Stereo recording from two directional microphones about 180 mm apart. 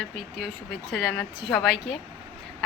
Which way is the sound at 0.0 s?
Centre (ahead or behind).